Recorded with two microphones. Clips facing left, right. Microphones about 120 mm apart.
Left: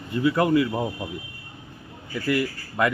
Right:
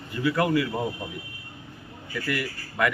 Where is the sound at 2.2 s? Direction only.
25° left (ahead or behind).